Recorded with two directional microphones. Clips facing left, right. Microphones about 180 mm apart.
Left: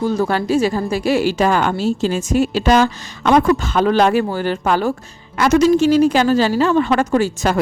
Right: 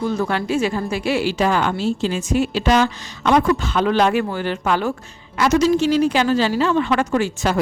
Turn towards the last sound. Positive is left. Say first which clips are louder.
# left 3 dB
turn(degrees=40)  # may be behind; listen again after turning